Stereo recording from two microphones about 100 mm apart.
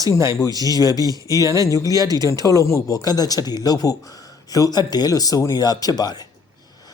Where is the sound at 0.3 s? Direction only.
35° left (ahead or behind).